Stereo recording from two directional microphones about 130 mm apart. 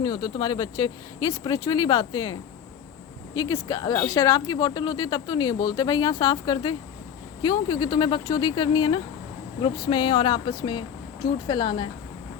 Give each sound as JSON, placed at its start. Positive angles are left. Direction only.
{"t": 0.0, "sound": "speech", "side_deg": 30}